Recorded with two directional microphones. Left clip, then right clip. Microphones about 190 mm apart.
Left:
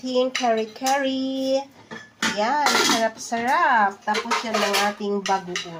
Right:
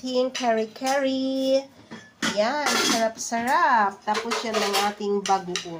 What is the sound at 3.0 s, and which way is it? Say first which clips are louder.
Speech: left 2 dB; 15° left (ahead or behind).